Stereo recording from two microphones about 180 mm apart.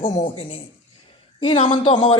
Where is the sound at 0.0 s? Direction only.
35° left (ahead or behind).